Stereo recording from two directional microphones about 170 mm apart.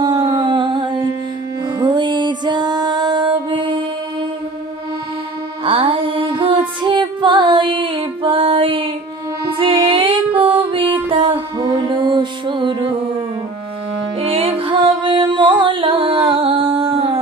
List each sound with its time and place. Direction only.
0.0 s a sound: 25° right (ahead or behind)
1.8 s music: 25° right (ahead or behind)
5.6 s music: 30° right (ahead or behind)
14.2 s music: 35° right (ahead or behind)